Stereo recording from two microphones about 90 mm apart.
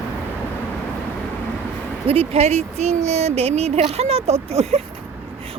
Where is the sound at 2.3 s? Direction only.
90° right.